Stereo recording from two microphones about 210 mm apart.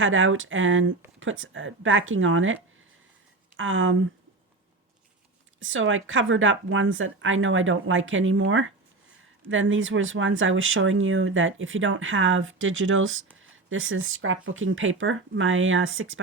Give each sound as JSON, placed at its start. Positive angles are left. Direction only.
{"t": 0.0, "sound": "speech", "side_deg": -70}
{"t": 3.6, "sound": "speech", "side_deg": -70}
{"t": 5.5, "sound": "speech", "side_deg": -70}